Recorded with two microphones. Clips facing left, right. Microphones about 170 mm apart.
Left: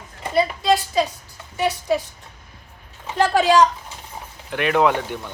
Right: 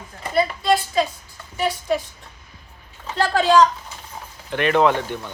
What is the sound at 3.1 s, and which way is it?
Speech, 15° left (ahead or behind).